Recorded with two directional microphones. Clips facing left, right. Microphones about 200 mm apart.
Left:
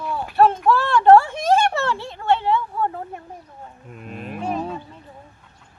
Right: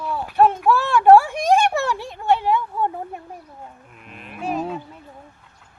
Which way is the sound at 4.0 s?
40° left (ahead or behind).